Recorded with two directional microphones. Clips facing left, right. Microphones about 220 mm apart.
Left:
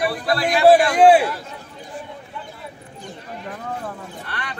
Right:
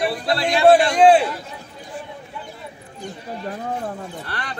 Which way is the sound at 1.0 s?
10° left (ahead or behind).